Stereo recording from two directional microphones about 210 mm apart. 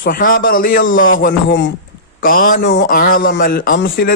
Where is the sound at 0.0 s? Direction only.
40° left (ahead or behind).